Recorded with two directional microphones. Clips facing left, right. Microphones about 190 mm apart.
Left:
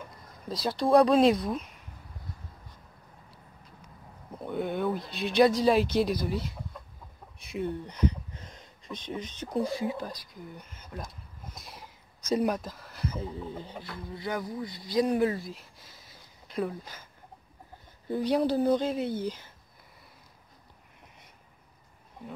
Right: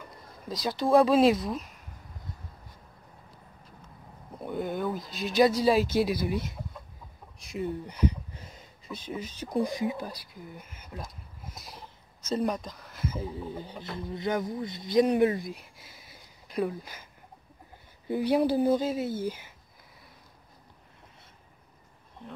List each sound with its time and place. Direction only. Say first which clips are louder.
0.5 s speech: even; centre (ahead or behind)
4.4 s a sound: left 1 dB; centre (ahead or behind)
5.9 s speech: right 1 dB; 5° right (ahead or behind)
7.3 s speech: even; centre (ahead or behind)
12.2 s speech: left 2 dB; 10° left (ahead or behind); by 13.7 s 10° right (ahead or behind)
13.8 s speech: right 6 dB; 20° right (ahead or behind)
15.8 s a sound: right 2 dB; 10° right (ahead or behind)
18.0 s speech: right 1 dB; 10° right (ahead or behind)